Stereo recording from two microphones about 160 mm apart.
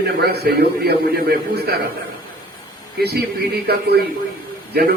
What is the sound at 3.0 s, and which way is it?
Speech, 90° right.